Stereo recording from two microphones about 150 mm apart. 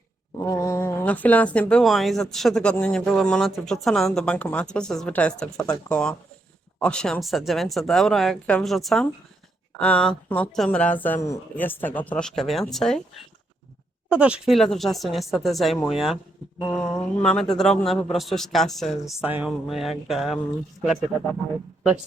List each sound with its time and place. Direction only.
0.3 s a woman's voice: 20° left (ahead or behind); by 13.2 s 5° left (ahead or behind)
14.1 s speech: 10° right (ahead or behind)
19.3 s a sound: 10° right (ahead or behind)
19.6 s speech: centre (ahead or behind)